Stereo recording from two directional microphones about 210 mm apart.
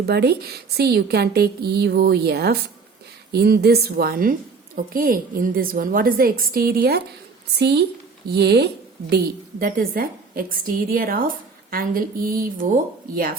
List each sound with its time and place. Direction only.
0.0 s a woman's voice: 50° right (ahead or behind)